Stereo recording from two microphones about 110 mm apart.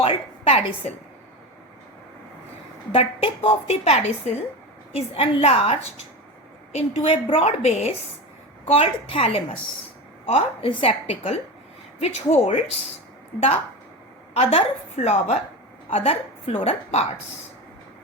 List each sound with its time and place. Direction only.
0.0 s a woman's voice: 60° left (ahead or behind)
2.9 s a woman's voice: 60° left (ahead or behind)
4.9 s a woman's voice: 55° left (ahead or behind); by 7.9 s 75° left (ahead or behind)
8.6 s a woman's voice: 55° left (ahead or behind)
11.9 s a woman's voice: 75° left (ahead or behind)
14.3 s a woman's voice: 65° left (ahead or behind); by 15.4 s 85° left
15.9 s a woman's voice: 60° left (ahead or behind)